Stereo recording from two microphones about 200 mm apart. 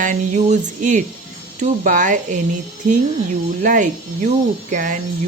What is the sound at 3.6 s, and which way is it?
Speech, 40° right (ahead or behind).